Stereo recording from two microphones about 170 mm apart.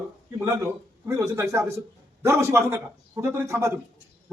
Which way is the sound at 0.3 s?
15° right (ahead or behind).